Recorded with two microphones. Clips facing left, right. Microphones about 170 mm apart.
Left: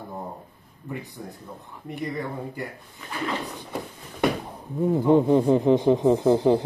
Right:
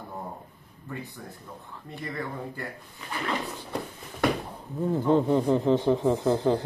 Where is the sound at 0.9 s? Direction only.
15° left (ahead or behind).